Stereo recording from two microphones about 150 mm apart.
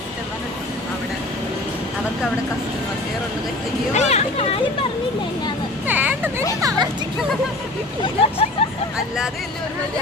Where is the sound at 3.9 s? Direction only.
45° left (ahead or behind).